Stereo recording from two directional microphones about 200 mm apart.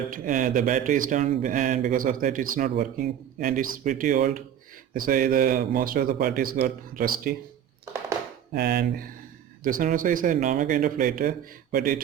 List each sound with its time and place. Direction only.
0.1 s speech: 40° right (ahead or behind)
8.5 s speech: 55° right (ahead or behind)
9.6 s speech: 45° right (ahead or behind)